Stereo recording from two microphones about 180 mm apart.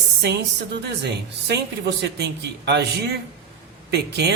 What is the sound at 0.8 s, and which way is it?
Speech, 65° right (ahead or behind).